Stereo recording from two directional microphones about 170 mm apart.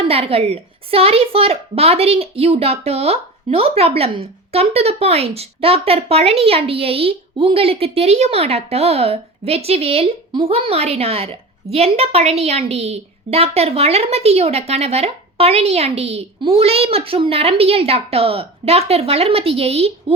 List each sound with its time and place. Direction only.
0.1 s a child's voice: 35° right (ahead or behind)